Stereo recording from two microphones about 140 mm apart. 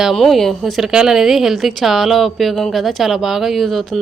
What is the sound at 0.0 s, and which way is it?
Speech, centre (ahead or behind).